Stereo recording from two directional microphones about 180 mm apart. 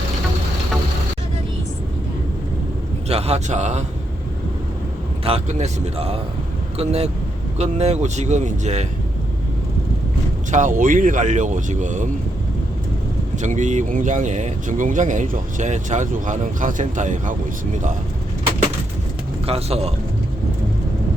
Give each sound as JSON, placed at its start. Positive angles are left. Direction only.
{"t": 3.1, "sound": "a man's voice", "side_deg": -35}
{"t": 5.2, "sound": "speech", "side_deg": -35}
{"t": 10.5, "sound": "speech", "side_deg": -45}
{"t": 13.3, "sound": "speech", "side_deg": -45}
{"t": 19.5, "sound": "speech", "side_deg": -35}